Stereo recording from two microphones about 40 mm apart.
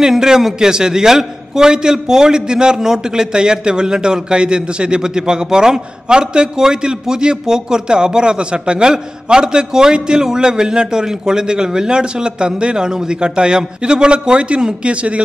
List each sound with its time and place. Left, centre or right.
0.0 s a man's voice: centre; by 15.2 s right